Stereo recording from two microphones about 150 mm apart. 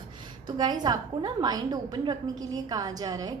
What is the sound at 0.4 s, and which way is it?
A woman's voice, 30° right (ahead or behind).